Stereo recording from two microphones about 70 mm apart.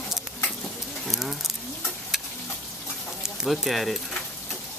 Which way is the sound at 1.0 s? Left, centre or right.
Centre.